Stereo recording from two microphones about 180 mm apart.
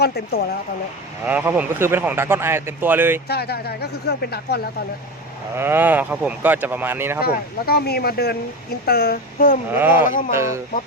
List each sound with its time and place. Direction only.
0.0 s speech: 65° left (ahead or behind)
1.2 s speech: 10° right (ahead or behind)
3.2 s speech: 60° left (ahead or behind)
5.5 s speech: 10° right (ahead or behind)
7.6 s speech: 60° left (ahead or behind)
9.7 s speech: 10° right (ahead or behind)